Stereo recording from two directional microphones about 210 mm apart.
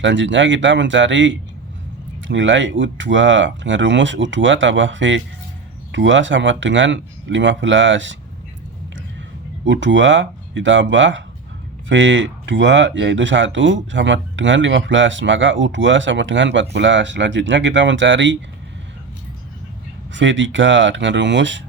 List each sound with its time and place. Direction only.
0.0 s speech: 60° right (ahead or behind)
9.6 s speech: 60° right (ahead or behind)
20.1 s speech: 60° right (ahead or behind)